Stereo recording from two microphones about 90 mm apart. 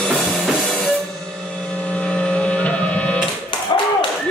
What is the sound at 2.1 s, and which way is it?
Printer, 15° left (ahead or behind).